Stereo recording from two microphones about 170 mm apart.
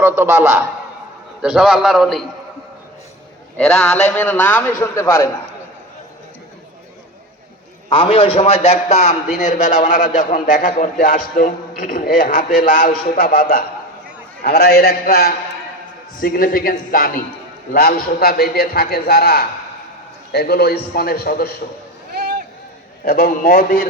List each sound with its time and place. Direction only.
0.0 s a man's voice: 15° right (ahead or behind)
1.4 s a man's voice: 5° right (ahead or behind)
3.6 s a man's voice: 5° left (ahead or behind)
7.9 s a man's voice: 30° left (ahead or behind); by 21.5 s 60° left (ahead or behind)
22.1 s a sound: 70° right (ahead or behind)
23.0 s a man's voice: 60° left (ahead or behind)